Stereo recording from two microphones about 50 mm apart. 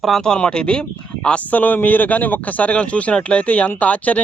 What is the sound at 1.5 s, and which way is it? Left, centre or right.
Speech, left.